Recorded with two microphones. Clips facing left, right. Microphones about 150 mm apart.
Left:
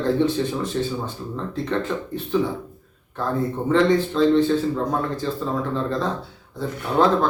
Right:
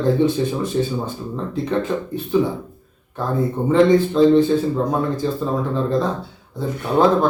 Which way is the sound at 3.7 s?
15° right (ahead or behind).